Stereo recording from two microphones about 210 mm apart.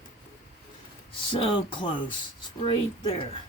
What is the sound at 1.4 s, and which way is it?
Speech, 25° left (ahead or behind).